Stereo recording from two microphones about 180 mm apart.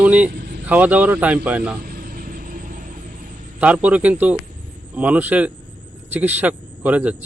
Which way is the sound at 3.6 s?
10° right (ahead or behind).